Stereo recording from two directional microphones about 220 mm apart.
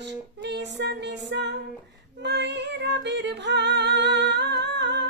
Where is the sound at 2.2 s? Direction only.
50° right (ahead or behind).